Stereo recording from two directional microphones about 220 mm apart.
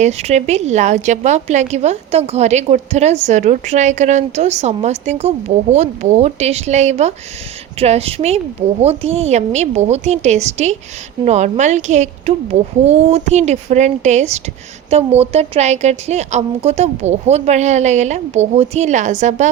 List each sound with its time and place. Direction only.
0.0 s a woman's voice: 30° right (ahead or behind)